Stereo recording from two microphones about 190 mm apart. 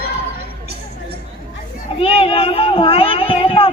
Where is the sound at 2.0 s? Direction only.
30° left (ahead or behind).